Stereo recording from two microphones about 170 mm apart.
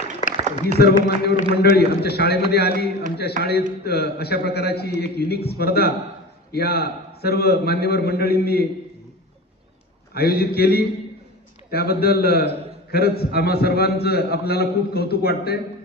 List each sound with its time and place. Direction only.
0.4 s a sound: 45° right (ahead or behind)
0.7 s a man's voice: 70° left (ahead or behind)
10.1 s a man's voice: 65° left (ahead or behind)